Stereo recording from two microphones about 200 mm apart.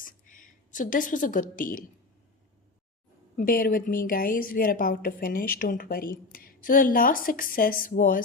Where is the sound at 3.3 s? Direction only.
45° left (ahead or behind).